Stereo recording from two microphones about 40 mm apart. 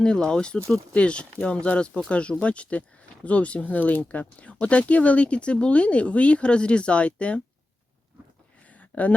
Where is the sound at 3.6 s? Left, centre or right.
Left.